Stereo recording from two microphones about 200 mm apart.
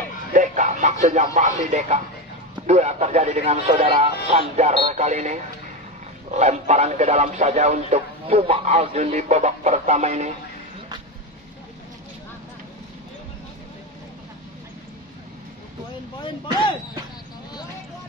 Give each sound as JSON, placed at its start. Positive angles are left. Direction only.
{"t": 0.3, "sound": "a man's voice", "side_deg": -40}